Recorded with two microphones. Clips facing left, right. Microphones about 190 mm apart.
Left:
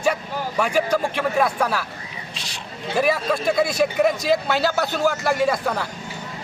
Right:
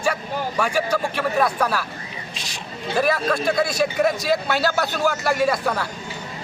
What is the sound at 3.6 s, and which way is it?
A man's voice, 15° left (ahead or behind).